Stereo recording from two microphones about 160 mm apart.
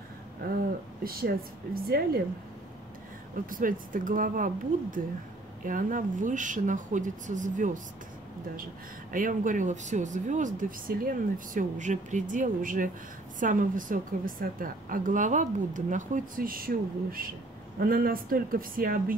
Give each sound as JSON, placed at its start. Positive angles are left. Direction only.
{"t": 1.0, "sound": "a woman's voice", "side_deg": -70}
{"t": 3.4, "sound": "a woman's voice", "side_deg": -60}
{"t": 9.1, "sound": "a woman's voice", "side_deg": -55}